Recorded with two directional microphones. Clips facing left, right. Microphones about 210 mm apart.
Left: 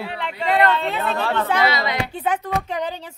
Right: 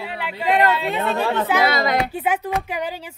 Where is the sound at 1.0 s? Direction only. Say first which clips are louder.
Right 2 dB; 20° right (ahead or behind).